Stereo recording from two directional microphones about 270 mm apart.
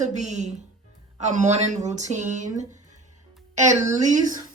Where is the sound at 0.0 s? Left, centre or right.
Right.